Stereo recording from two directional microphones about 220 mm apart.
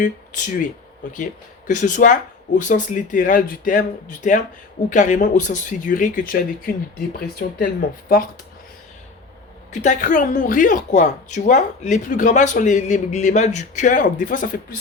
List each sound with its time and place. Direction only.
0.0 s a woman's voice: 35° left (ahead or behind)
9.8 s a woman's voice: 35° left (ahead or behind)